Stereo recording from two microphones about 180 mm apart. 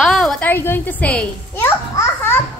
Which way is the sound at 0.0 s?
Centre (ahead or behind).